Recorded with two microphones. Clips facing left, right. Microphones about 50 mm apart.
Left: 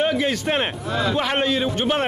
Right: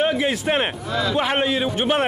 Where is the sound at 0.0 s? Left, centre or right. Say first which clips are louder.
Right 1 dB; centre.